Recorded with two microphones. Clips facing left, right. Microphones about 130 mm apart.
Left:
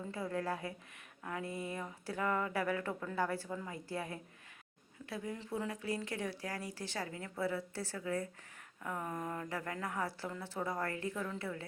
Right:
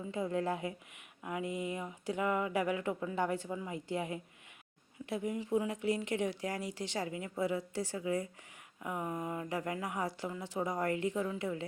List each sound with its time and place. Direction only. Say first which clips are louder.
0.1 s a woman's voice: right 4 dB; 20° right (ahead or behind)